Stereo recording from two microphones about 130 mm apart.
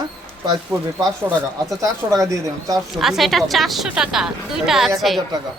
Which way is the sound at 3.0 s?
Centre (ahead or behind).